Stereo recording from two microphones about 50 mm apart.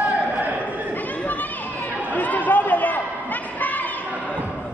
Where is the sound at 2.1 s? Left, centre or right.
Left.